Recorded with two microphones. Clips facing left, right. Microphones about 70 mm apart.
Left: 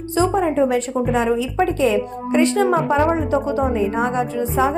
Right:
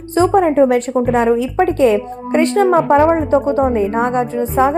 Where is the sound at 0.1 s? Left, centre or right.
Right.